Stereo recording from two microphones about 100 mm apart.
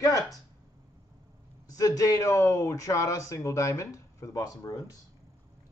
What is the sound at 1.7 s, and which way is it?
Speech, 35° left (ahead or behind).